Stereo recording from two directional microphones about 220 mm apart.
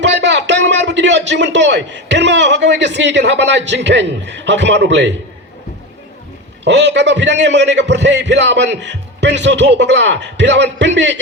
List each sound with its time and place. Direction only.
0.0 s a sound: 55° right (ahead or behind)
3.7 s a man's voice: 50° right (ahead or behind)
6.7 s a man's voice: 50° right (ahead or behind)